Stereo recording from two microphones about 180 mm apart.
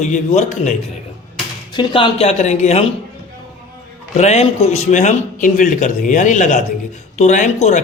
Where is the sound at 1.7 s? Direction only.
25° left (ahead or behind).